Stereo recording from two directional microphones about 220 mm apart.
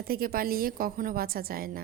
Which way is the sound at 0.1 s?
45° right (ahead or behind).